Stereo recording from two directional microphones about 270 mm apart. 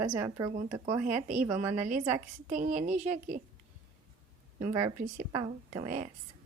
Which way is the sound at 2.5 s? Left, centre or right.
Right.